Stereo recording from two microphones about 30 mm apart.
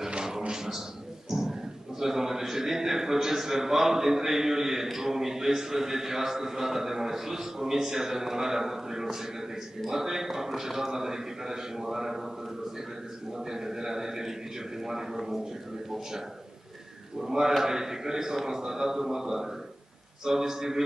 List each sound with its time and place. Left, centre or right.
1.3 s a sound: centre
4.9 s a man's voice: centre
13.3 s a man's voice: centre
17.2 s a man's voice: centre